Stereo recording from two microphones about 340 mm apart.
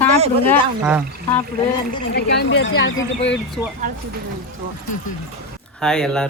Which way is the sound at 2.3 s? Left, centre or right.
Left.